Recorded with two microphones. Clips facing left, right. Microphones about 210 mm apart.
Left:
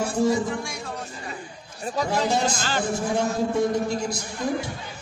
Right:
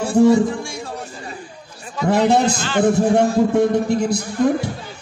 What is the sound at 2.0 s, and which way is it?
Speech, 60° right (ahead or behind).